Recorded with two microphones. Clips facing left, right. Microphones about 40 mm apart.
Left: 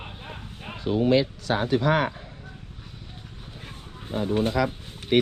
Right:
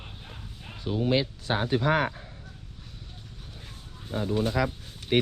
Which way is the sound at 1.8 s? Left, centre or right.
Left.